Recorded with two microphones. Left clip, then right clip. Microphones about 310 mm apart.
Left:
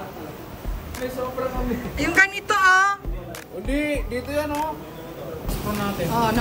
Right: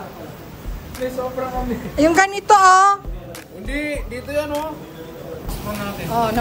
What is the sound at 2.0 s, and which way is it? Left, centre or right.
A woman's voice, centre.